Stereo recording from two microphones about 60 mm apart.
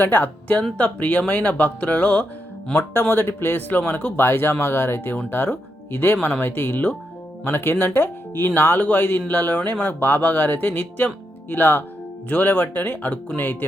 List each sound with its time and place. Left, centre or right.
0.0 s speech: left
2.7 s speech: left